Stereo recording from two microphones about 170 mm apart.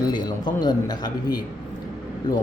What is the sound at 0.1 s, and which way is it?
Speech, 25° left (ahead or behind).